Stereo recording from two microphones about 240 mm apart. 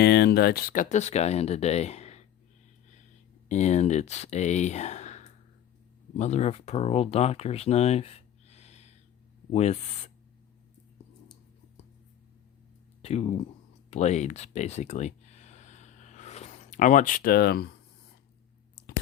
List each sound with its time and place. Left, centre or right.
0.0 s speech: left
3.5 s speech: left
13.0 s speech: left
13.9 s a sound: left